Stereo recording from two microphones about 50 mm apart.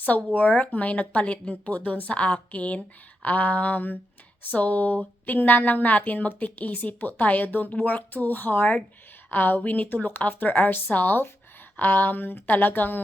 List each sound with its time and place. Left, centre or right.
0.0 s speech: left